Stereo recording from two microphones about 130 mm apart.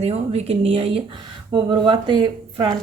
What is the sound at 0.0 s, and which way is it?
Speech, 55° right (ahead or behind).